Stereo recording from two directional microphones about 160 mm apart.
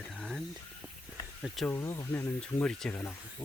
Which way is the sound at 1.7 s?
15° left (ahead or behind).